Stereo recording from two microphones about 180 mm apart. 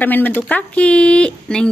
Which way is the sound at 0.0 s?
10° left (ahead or behind).